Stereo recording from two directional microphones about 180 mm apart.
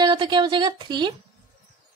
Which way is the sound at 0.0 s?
25° right (ahead or behind).